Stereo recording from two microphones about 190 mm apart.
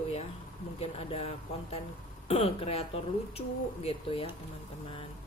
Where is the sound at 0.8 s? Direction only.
30° left (ahead or behind).